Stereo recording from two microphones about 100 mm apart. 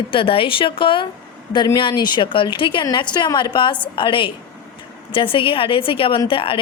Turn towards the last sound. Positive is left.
turn(degrees=60)  # may be behind; listen again after turning